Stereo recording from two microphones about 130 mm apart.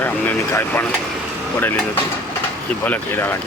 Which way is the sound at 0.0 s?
15° left (ahead or behind).